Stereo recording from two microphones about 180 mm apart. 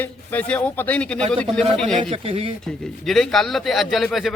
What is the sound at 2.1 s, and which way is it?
Speech, 35° right (ahead or behind).